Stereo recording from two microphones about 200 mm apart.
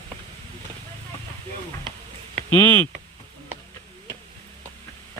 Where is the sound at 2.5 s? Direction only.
10° left (ahead or behind).